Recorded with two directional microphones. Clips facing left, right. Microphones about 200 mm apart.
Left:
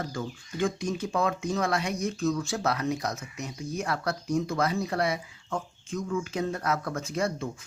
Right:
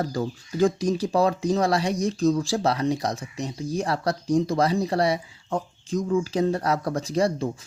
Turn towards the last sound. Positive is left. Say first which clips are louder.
# right 6 dB
turn(degrees=-35)  # may be behind; listen again after turning